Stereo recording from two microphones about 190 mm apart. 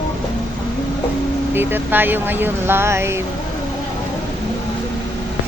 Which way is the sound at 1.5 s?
10° right (ahead or behind).